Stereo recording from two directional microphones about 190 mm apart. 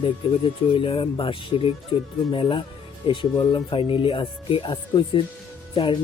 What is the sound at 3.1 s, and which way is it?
Speech, 30° left (ahead or behind).